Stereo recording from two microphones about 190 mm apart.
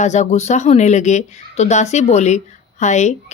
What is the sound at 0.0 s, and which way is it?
Speech, 40° left (ahead or behind).